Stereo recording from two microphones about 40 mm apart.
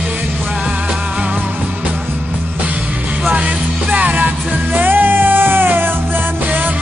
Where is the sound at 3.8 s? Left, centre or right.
Right.